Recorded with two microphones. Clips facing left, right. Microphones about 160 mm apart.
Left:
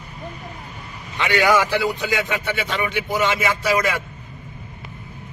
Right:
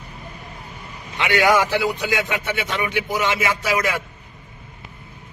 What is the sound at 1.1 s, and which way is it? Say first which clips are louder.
Speech: even; 15° right (ahead or behind).